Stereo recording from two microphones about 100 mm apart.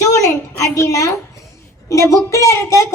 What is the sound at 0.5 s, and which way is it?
A woman's voice, 30° left (ahead or behind).